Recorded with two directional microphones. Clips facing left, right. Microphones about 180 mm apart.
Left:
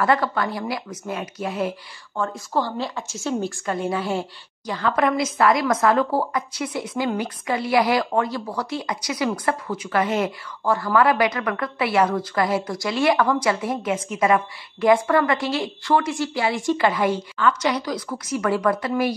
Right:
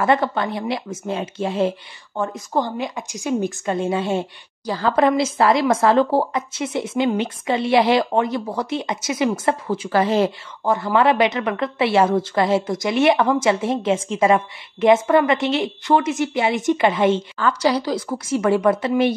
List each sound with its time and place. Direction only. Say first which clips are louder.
0.0 s a woman's voice: right 2 dB; 25° right (ahead or behind)